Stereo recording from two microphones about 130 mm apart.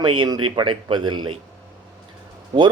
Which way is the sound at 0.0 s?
40° right (ahead or behind).